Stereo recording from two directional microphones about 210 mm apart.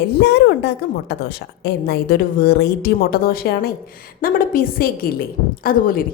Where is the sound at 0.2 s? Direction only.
55° left (ahead or behind).